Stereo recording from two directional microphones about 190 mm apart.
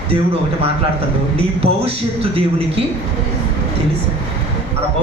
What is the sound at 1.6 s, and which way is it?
Speech, 30° right (ahead or behind).